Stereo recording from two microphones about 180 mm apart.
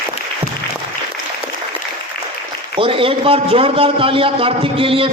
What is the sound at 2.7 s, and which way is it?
A man's voice, 30° right (ahead or behind).